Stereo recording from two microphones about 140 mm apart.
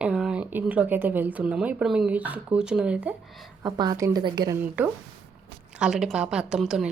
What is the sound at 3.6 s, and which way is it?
Speech, 30° right (ahead or behind).